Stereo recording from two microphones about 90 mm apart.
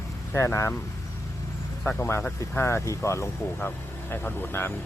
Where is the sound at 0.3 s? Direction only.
30° left (ahead or behind).